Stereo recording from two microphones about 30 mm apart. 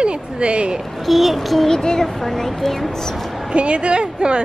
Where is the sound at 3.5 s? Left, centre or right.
Right.